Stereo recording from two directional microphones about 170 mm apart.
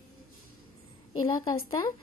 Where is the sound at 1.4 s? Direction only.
20° left (ahead or behind).